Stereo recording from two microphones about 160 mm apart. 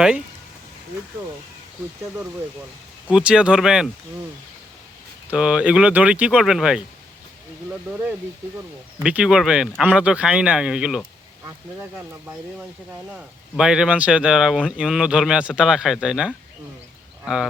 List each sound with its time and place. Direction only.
3.1 s speech: 5° right (ahead or behind)
5.3 s speech: 5° right (ahead or behind)
7.9 s speech: 10° right (ahead or behind)
13.1 s speech: 5° right (ahead or behind)